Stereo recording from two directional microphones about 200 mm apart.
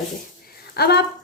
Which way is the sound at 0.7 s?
55° left (ahead or behind).